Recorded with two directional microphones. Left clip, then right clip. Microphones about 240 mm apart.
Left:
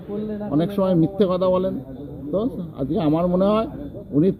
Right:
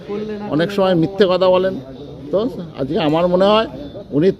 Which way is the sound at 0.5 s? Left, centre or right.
Centre.